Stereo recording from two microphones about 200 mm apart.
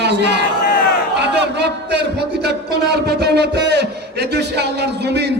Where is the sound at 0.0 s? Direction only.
55° right (ahead or behind).